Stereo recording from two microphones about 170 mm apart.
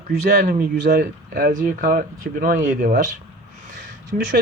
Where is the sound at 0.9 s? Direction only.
60° right (ahead or behind).